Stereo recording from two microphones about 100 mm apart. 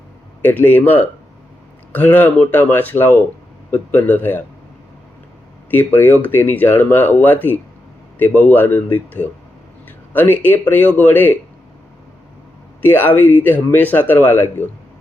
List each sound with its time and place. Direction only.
0.4 s speech: 20° left (ahead or behind)
5.7 s speech: 20° left (ahead or behind)
12.8 s speech: 20° left (ahead or behind)